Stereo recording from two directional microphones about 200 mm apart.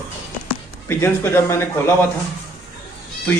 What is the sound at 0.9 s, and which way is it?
Speech, 10° left (ahead or behind).